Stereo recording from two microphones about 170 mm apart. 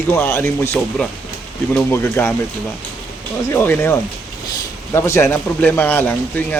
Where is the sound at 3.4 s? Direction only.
15° left (ahead or behind).